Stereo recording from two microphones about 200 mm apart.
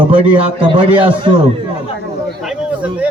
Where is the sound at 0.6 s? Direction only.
25° right (ahead or behind).